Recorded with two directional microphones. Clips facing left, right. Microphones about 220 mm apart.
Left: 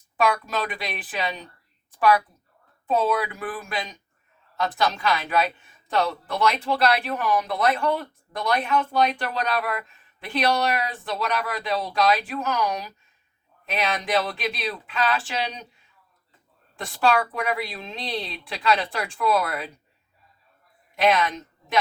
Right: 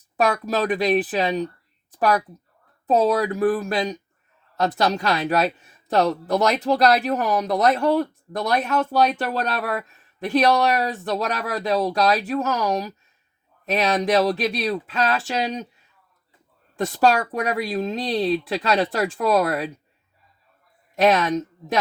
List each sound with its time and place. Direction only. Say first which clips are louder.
0.2 s speech: right 3 dB; 40° right (ahead or behind)
1.9 s a sound: even; 40° right (ahead or behind)
2.8 s speech: right 4 dB; 40° right (ahead or behind)
16.7 s speech: right 3 dB; 40° right (ahead or behind)
20.9 s a woman's voice: right 4 dB; 40° right (ahead or behind)